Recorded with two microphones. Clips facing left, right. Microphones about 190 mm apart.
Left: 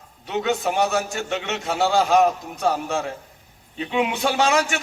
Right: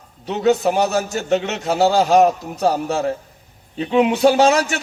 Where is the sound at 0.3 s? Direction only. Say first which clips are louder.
Right 6 dB; 40° right (ahead or behind).